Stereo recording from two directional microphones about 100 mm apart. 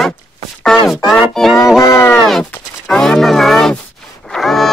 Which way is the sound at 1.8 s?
30° left (ahead or behind).